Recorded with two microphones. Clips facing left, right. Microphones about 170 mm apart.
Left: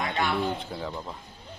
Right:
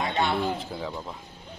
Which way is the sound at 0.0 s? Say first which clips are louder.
Right 2 dB; 25° right (ahead or behind).